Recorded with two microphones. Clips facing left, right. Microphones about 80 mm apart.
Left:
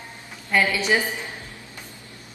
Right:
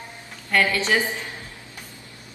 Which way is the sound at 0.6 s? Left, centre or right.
Centre.